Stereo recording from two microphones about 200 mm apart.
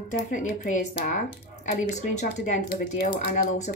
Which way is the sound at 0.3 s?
40° left (ahead or behind).